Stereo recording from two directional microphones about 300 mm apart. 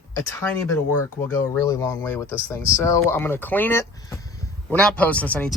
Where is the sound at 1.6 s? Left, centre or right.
Centre.